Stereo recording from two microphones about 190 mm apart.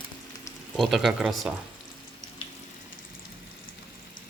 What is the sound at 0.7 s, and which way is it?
Speech, centre (ahead or behind).